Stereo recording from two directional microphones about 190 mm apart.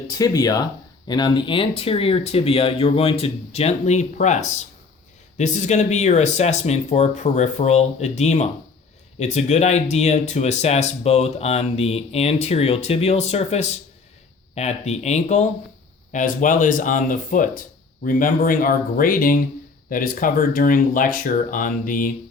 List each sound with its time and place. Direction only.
0.2 s speech: 20° left (ahead or behind); by 22.1 s 45° left (ahead or behind)